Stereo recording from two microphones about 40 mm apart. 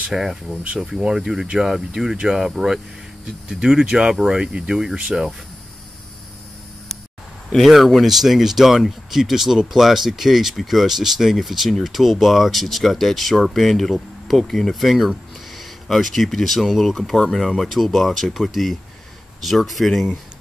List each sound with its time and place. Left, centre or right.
0.1 s speech: centre
7.4 s speech: centre